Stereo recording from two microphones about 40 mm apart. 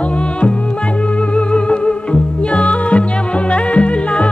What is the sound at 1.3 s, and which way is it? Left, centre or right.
Music, left.